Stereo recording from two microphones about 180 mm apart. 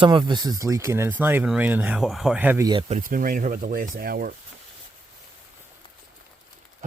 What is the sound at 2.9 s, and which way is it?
Speech, 45° right (ahead or behind).